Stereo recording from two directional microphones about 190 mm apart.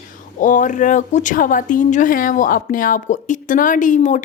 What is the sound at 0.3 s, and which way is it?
A woman's voice, 45° left (ahead or behind).